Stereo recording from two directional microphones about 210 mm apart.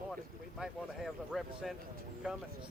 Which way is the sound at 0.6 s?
Centre (ahead or behind).